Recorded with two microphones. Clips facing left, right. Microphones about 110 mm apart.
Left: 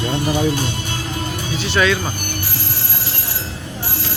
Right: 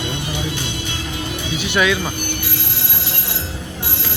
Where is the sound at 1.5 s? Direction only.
15° right (ahead or behind).